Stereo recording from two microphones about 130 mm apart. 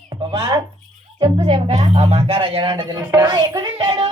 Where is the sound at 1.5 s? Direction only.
55° right (ahead or behind).